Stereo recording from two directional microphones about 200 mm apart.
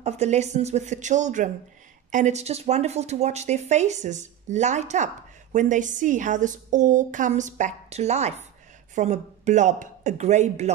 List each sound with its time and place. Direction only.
0.0 s speech: 35° right (ahead or behind)